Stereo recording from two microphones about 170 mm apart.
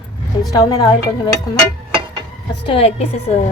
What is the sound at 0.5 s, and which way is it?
Speech, 20° left (ahead or behind).